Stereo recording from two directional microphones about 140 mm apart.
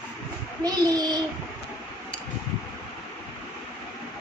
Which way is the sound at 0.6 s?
30° right (ahead or behind).